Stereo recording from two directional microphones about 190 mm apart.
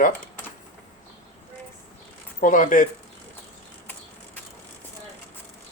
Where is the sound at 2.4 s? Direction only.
45° left (ahead or behind).